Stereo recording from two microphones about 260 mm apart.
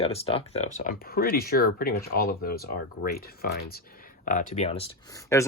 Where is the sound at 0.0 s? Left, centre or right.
Left.